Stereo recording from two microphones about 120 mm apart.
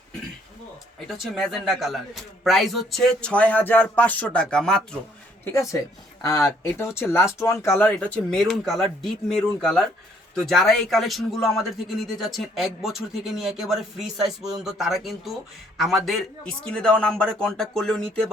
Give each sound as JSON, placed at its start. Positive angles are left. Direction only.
{"t": 0.9, "sound": "speech", "side_deg": 0}
{"t": 5.5, "sound": "speech", "side_deg": 25}
{"t": 7.9, "sound": "speech", "side_deg": 10}